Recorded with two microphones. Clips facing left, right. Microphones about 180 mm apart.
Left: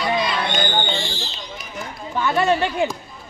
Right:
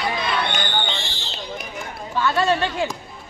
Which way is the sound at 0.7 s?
45° left (ahead or behind).